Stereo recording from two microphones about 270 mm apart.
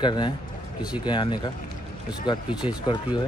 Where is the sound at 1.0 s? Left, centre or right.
Centre.